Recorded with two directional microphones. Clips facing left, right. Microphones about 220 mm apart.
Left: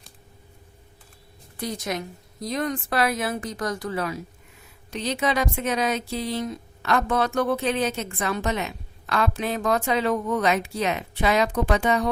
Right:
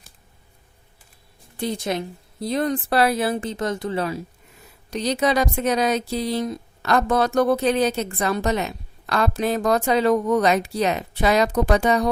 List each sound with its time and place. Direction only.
1.5 s speech: 30° right (ahead or behind)
4.9 s speech: 40° right (ahead or behind)